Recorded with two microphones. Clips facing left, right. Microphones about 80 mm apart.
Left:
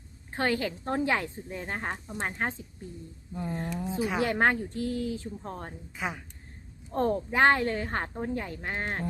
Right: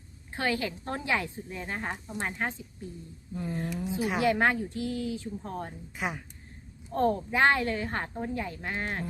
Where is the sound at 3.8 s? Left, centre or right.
Left.